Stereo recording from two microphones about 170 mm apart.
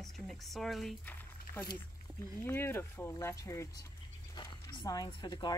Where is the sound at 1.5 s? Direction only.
55° right (ahead or behind).